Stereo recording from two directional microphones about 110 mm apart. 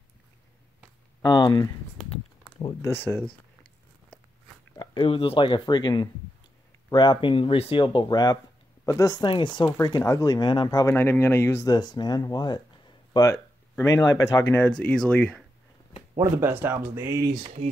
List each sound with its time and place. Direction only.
1.2 s speech: 40° left (ahead or behind)
2.8 s speech: 20° left (ahead or behind)
5.0 s speech: 60° left (ahead or behind)
7.8 s speech: 45° left (ahead or behind)
9.2 s speech: 45° left (ahead or behind)
9.8 s speech: 35° left (ahead or behind)
10.9 s speech: 20° left (ahead or behind)
11.7 s speech: 40° left (ahead or behind)
13.3 s speech: 30° left (ahead or behind)
14.6 s speech: 15° left (ahead or behind)
16.2 s speech: 20° right (ahead or behind)
17.2 s speech: 35° right (ahead or behind)